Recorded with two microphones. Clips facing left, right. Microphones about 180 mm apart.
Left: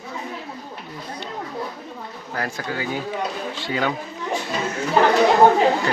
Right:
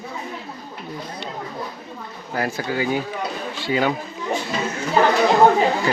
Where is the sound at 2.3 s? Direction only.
10° right (ahead or behind).